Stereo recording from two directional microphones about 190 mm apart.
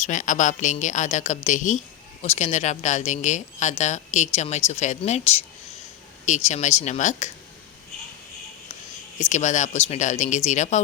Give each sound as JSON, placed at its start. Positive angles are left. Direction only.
{"t": 0.0, "sound": "speech", "side_deg": 40}
{"t": 9.3, "sound": "speech", "side_deg": 40}